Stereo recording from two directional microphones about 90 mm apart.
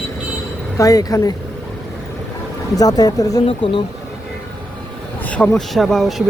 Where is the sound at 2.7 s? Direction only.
45° left (ahead or behind).